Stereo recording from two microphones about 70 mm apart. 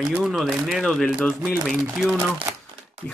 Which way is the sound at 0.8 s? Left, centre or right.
Centre.